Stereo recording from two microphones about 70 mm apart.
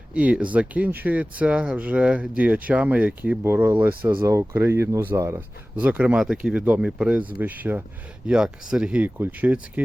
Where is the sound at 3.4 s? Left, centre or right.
Right.